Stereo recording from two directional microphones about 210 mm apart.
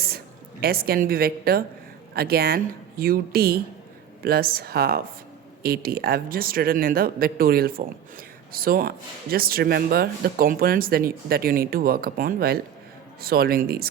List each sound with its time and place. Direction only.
0.6 s speech: 45° right (ahead or behind)